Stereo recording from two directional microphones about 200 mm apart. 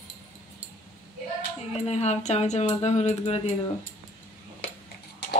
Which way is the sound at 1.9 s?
35° left (ahead or behind).